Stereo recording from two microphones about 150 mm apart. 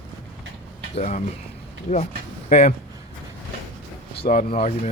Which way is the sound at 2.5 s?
50° left (ahead or behind).